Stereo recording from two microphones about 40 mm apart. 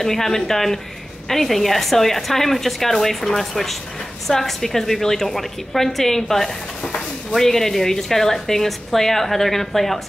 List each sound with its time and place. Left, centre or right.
0.0 s a woman's voice: centre
6.8 s a sound: left
7.3 s a woman's voice: centre